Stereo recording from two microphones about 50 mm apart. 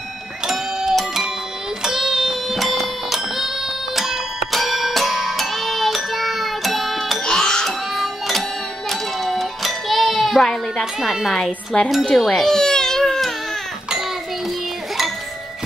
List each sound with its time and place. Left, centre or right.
0.5 s music: centre
7.2 s music: centre
11.0 s a woman's voice: centre
11.7 s a sound: centre
12.2 s baby cry: centre